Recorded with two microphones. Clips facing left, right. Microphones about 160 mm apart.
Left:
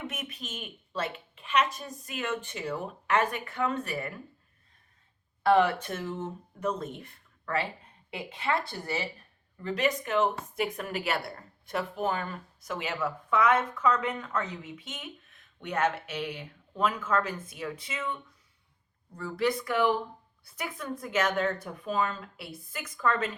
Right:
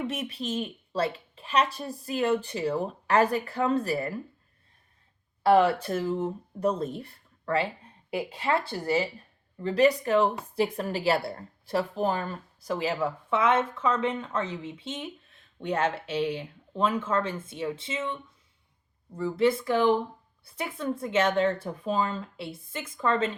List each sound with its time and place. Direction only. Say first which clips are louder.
0.1 s a woman's voice: right 8 dB; 30° right (ahead or behind)
5.5 s a woman's voice: right 3 dB; 30° right (ahead or behind)